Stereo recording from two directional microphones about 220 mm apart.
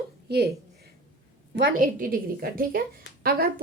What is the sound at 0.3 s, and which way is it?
Speech, 45° right (ahead or behind).